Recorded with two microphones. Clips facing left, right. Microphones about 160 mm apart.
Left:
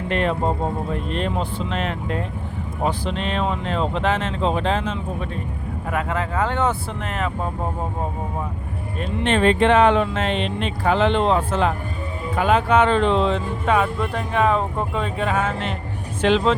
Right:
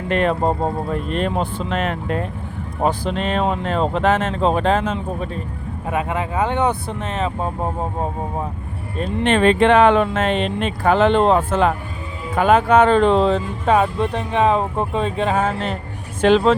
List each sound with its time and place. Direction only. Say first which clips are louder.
0.1 s speech: right 4 dB; 50° right (ahead or behind)
5.9 s speech: right 2 dB; 20° right (ahead or behind)
9.2 s speech: right 3 dB; 65° right (ahead or behind); by 16.6 s 45° right (ahead or behind)